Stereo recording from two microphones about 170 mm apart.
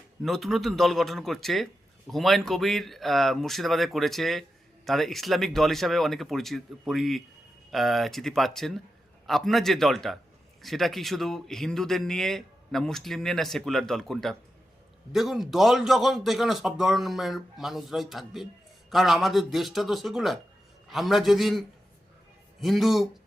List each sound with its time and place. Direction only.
0.2 s speech: centre (ahead or behind)
22.6 s speech: centre (ahead or behind)